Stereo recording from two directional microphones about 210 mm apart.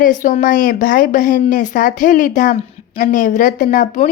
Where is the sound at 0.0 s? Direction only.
35° left (ahead or behind).